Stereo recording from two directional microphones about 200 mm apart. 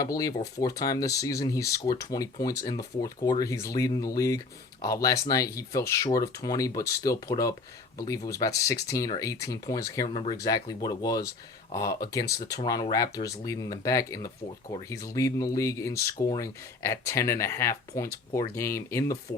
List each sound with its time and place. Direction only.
0.0 s speech: 20° left (ahead or behind)